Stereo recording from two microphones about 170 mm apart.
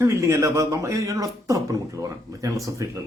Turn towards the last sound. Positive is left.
turn(degrees=-20)  # may be behind; listen again after turning